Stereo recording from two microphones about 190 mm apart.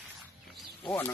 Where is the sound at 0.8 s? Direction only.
10° left (ahead or behind).